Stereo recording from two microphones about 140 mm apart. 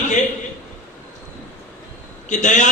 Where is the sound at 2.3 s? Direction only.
60° left (ahead or behind).